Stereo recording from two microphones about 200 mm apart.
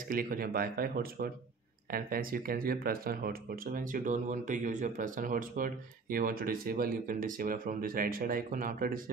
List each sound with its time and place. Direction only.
0.1 s speech: 45° right (ahead or behind)